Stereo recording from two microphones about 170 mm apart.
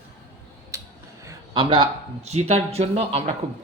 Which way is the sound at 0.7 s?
20° right (ahead or behind).